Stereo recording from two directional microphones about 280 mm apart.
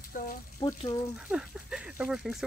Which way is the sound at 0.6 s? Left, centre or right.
Centre.